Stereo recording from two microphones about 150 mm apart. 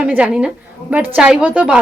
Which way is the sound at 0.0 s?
10° right (ahead or behind).